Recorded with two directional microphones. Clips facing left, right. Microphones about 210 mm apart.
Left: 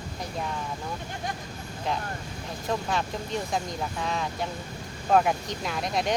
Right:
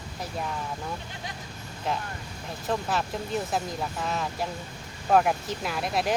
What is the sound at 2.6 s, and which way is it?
Speech, 5° right (ahead or behind).